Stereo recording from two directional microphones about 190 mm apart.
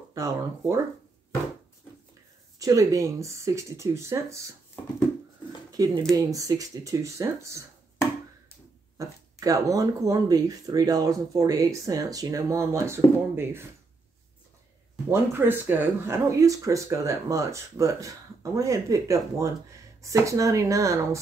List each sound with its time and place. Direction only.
0.1 s speech: 15° right (ahead or behind)
2.6 s speech: 20° right (ahead or behind)
5.7 s speech: 20° right (ahead or behind)
8.9 s speech: 20° right (ahead or behind)
15.0 s speech: 10° right (ahead or behind)